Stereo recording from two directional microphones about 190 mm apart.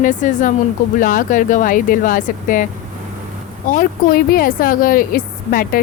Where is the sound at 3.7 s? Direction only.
45° left (ahead or behind).